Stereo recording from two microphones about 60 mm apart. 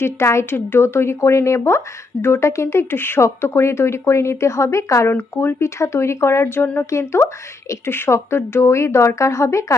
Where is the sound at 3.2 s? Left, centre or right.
Left.